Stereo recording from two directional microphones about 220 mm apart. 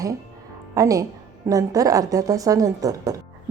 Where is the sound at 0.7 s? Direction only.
15° right (ahead or behind).